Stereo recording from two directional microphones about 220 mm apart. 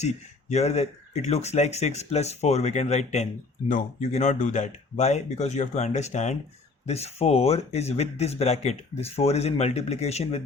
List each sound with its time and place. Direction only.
0.0 s speech: 30° left (ahead or behind)